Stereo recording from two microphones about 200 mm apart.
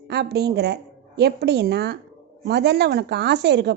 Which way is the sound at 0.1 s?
55° right (ahead or behind).